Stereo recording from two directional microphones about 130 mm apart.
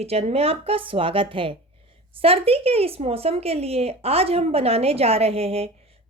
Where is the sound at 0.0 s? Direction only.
55° right (ahead or behind).